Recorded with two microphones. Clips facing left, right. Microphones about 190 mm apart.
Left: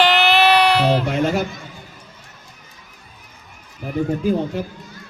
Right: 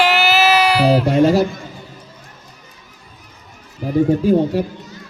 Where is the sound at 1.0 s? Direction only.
35° right (ahead or behind).